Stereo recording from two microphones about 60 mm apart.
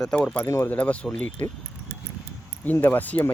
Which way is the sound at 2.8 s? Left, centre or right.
Left.